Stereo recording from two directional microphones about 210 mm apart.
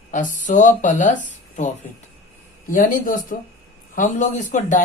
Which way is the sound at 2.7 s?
40° left (ahead or behind).